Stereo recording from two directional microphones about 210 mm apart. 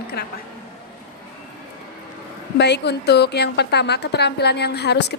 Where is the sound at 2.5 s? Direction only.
50° left (ahead or behind).